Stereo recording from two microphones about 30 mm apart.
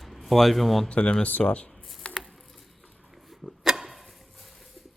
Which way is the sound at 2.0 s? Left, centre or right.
Left.